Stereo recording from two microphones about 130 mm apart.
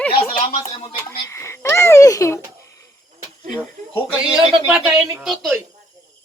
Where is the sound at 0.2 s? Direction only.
45° left (ahead or behind).